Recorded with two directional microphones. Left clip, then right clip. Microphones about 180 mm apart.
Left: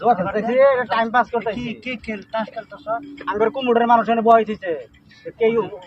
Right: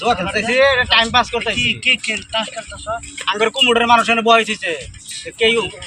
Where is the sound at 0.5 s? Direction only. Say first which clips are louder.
Right 3 dB; 10° left (ahead or behind).